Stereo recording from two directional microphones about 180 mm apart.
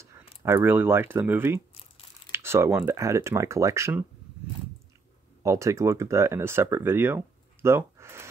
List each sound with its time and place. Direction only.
0.4 s speech: 15° right (ahead or behind)
5.4 s speech: 15° right (ahead or behind)